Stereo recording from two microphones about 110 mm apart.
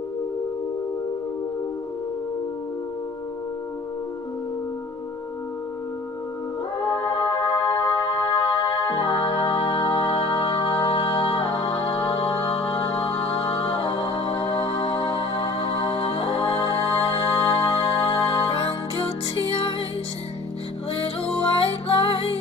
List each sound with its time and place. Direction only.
6.9 s music: 50° left (ahead or behind)
21.5 s music: 55° left (ahead or behind)